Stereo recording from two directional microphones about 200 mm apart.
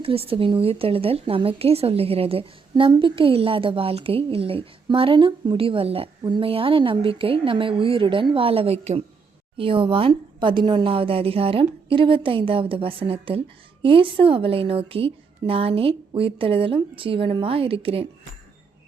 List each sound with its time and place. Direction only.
0.0 s a woman's voice: 30° right (ahead or behind)